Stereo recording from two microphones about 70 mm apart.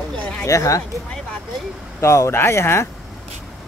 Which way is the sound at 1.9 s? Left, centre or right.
Left.